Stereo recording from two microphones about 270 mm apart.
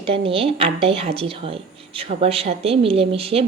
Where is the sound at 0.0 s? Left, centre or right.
Centre.